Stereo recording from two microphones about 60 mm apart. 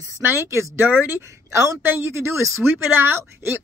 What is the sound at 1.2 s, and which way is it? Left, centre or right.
Speech, right.